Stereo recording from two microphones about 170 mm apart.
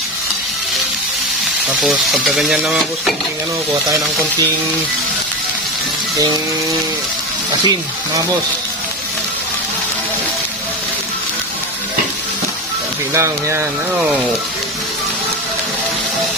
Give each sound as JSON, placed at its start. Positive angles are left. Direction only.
{"t": 1.8, "sound": "speech", "side_deg": 0}
{"t": 13.1, "sound": "speech", "side_deg": -15}